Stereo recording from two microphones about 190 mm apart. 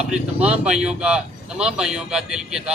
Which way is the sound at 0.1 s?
5° right (ahead or behind).